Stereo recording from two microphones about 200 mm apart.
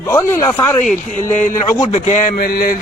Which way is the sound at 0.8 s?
40° left (ahead or behind).